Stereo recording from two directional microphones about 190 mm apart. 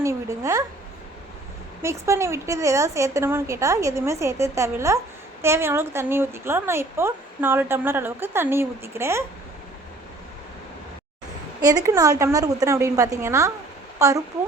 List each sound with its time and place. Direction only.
0.0 s a woman's voice: 15° right (ahead or behind)
1.8 s a woman's voice: 15° right (ahead or behind)
11.6 s a woman's voice: 20° right (ahead or behind)